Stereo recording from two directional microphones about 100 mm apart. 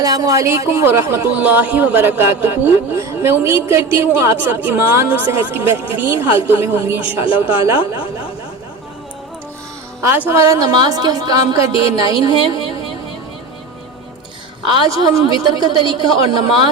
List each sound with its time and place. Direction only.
0.0 s speech: 40° right (ahead or behind)
1.4 s speech: 15° right (ahead or behind)
10.0 s speech: 25° right (ahead or behind)
10.7 s a woman's voice: 45° right (ahead or behind)
14.6 s a woman's voice: 55° right (ahead or behind)
14.8 s a woman's voice: 35° right (ahead or behind)